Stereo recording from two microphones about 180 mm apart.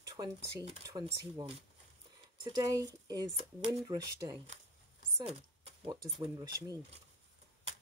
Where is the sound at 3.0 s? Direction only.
20° right (ahead or behind).